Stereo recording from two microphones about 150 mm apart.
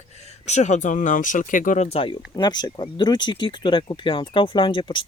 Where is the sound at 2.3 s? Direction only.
30° left (ahead or behind).